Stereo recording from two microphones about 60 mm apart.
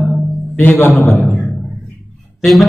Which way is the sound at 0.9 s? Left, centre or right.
Centre.